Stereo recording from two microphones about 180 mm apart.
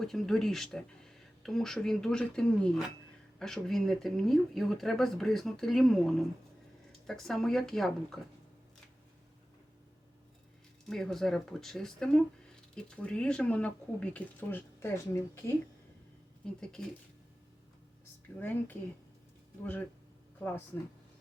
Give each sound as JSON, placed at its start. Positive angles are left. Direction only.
{"t": 0.0, "sound": "speech", "side_deg": 0}
{"t": 10.8, "sound": "speech", "side_deg": 0}
{"t": 18.3, "sound": "speech", "side_deg": 10}